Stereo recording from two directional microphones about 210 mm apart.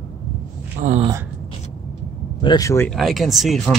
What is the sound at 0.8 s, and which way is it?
Speech, 40° right (ahead or behind).